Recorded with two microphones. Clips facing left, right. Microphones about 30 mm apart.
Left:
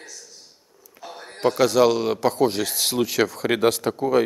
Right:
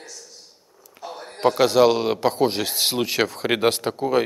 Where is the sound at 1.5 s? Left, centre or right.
Centre.